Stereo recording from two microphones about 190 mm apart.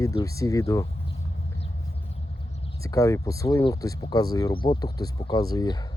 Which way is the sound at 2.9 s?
15° left (ahead or behind).